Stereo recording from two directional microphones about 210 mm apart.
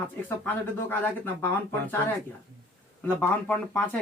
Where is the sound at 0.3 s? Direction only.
10° left (ahead or behind).